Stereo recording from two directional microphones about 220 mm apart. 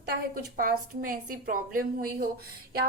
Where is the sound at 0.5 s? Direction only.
40° right (ahead or behind).